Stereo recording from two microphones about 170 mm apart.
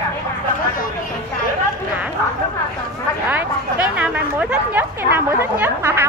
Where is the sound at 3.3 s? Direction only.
10° right (ahead or behind).